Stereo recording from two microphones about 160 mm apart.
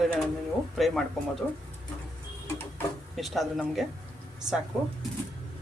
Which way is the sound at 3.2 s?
Centre (ahead or behind).